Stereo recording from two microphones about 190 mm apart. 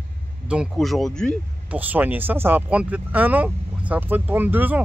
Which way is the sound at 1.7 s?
10° right (ahead or behind).